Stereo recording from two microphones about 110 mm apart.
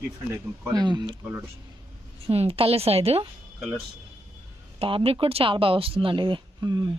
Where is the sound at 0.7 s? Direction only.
40° right (ahead or behind).